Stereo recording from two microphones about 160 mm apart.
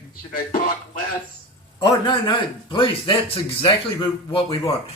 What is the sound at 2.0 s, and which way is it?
Speech, 30° left (ahead or behind).